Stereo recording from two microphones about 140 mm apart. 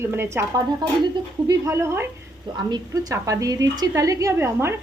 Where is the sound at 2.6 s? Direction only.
30° right (ahead or behind).